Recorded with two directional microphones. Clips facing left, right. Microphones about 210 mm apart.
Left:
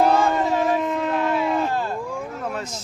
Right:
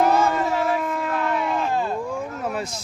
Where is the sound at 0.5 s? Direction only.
20° left (ahead or behind).